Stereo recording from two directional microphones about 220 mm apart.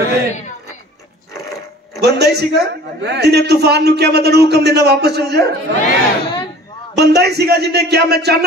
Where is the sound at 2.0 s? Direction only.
50° right (ahead or behind).